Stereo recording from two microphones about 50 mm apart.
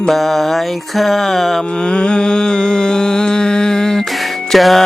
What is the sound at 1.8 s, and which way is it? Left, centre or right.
Music, centre.